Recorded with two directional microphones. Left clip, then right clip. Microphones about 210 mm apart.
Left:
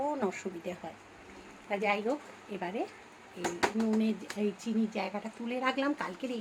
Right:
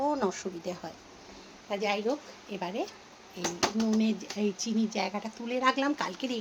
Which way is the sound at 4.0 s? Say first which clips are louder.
Right 2 dB; 10° right (ahead or behind).